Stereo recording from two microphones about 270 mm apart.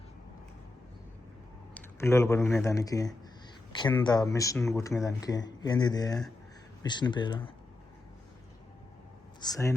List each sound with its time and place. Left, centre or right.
1.7 s speech: centre
9.4 s speech: centre